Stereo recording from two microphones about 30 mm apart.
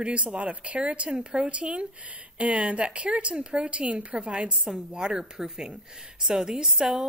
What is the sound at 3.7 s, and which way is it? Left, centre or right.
A woman's voice, right.